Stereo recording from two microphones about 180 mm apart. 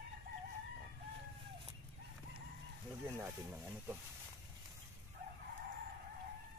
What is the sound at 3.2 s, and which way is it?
Speech, 10° right (ahead or behind).